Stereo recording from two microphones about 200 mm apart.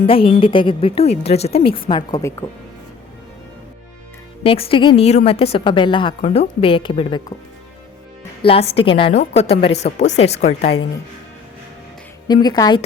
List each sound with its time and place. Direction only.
0.1 s a woman's voice: 25° left (ahead or behind)
4.4 s a woman's voice: 30° left (ahead or behind)
8.4 s a woman's voice: 30° left (ahead or behind)
12.3 s a woman's voice: 20° left (ahead or behind)